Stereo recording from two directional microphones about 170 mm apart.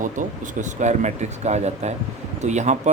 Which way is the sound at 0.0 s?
50° right (ahead or behind).